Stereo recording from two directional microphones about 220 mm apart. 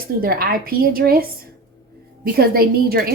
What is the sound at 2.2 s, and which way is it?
Speech, 45° right (ahead or behind).